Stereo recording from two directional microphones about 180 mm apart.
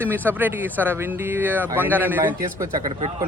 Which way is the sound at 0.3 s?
10° right (ahead or behind).